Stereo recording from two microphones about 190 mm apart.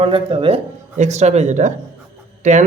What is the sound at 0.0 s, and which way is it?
Speech, 30° right (ahead or behind).